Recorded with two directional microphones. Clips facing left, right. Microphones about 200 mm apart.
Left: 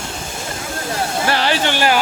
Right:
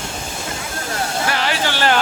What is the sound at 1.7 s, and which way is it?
Speech, 15° left (ahead or behind).